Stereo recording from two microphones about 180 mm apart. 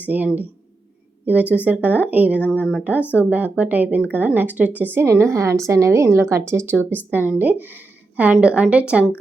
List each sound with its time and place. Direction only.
0.0 s a woman's voice: 10° right (ahead or behind)